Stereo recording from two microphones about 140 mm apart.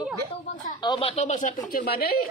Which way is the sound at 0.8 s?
35° left (ahead or behind).